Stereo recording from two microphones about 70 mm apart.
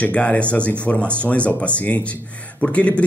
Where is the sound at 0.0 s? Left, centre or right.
Centre.